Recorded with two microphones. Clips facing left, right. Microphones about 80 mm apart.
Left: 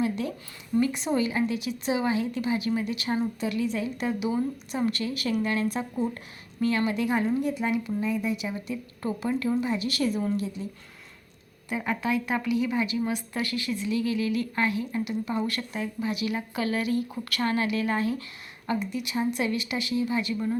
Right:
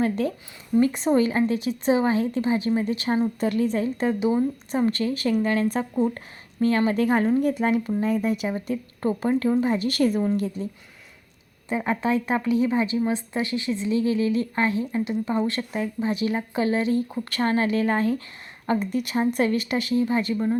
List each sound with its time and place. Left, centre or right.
0.0 s a woman's voice: right
11.7 s a woman's voice: right